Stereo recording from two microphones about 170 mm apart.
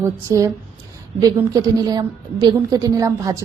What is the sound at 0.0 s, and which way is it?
A woman's voice, 20° right (ahead or behind).